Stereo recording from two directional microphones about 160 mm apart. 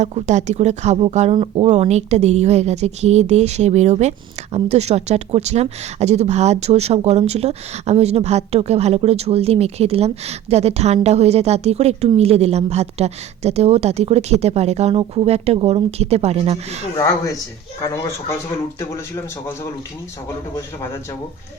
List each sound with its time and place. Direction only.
0.0 s a woman's voice: 45° right (ahead or behind)
18.8 s a man's voice: 20° left (ahead or behind)